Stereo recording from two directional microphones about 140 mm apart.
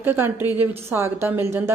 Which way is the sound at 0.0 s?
15° right (ahead or behind).